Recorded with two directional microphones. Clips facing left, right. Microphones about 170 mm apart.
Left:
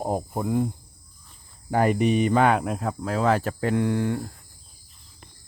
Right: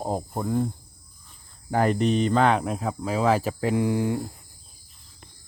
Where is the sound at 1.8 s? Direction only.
10° left (ahead or behind); by 4.3 s 10° right (ahead or behind).